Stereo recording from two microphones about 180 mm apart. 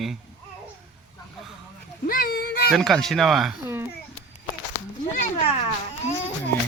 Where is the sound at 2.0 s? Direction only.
55° left (ahead or behind).